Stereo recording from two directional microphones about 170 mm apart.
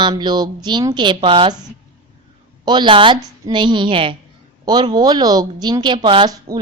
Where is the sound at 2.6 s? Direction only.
25° right (ahead or behind).